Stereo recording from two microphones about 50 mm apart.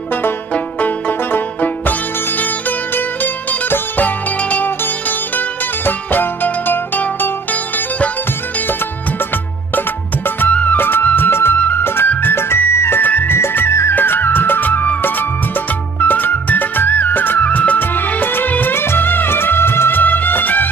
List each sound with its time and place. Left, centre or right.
0.7 s music: left
5.9 s music: left
9.8 s music: left
10.5 s music: left
10.8 s music: left
13.0 s music: left